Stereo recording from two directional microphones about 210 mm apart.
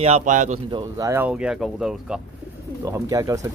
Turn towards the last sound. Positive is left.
turn(degrees=-15)  # may be behind; listen again after turning